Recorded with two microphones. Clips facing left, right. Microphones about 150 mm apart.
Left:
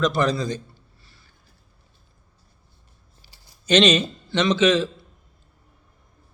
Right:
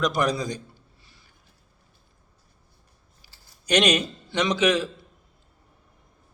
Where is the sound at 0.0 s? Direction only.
15° right (ahead or behind).